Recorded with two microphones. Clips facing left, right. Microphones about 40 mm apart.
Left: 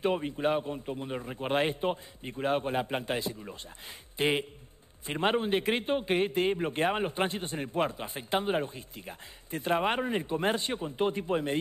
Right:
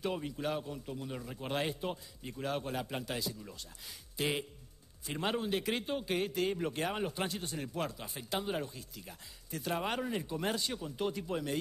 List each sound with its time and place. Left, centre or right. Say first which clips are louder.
0.0 s a man's voice: left 7 dB; left